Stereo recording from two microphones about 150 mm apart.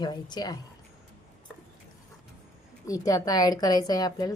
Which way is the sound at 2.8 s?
25° left (ahead or behind).